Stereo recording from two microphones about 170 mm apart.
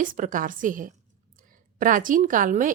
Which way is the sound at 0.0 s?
50° right (ahead or behind).